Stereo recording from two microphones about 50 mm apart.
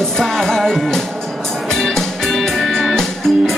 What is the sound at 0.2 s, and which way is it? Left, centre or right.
Music, centre.